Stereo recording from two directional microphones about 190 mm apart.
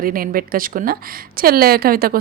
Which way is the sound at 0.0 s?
50° right (ahead or behind).